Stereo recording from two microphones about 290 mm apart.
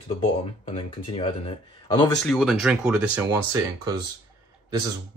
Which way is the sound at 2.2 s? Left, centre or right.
Centre.